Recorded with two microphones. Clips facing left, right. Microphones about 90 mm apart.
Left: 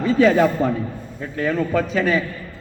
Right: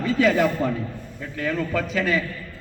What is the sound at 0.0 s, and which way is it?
A man's voice, 35° left (ahead or behind).